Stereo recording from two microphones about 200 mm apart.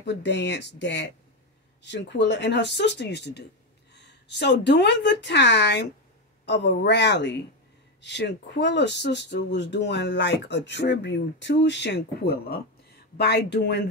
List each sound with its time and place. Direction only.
0.0 s a woman's voice: 60° left (ahead or behind)